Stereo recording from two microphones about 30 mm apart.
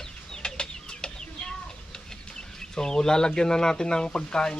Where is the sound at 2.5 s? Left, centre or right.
Centre.